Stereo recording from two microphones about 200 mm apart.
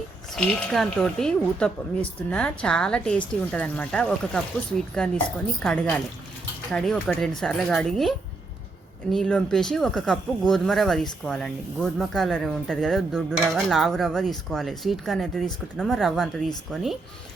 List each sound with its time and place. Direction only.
0.3 s speech: centre (ahead or behind)
9.1 s speech: centre (ahead or behind)